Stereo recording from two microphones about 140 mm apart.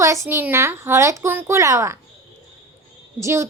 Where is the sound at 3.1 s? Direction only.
20° right (ahead or behind).